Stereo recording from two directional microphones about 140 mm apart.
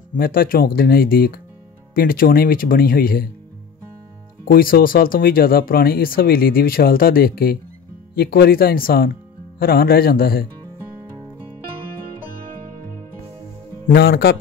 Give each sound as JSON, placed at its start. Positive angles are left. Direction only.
{"t": 0.1, "sound": "speech", "side_deg": 90}
{"t": 4.5, "sound": "speech", "side_deg": 90}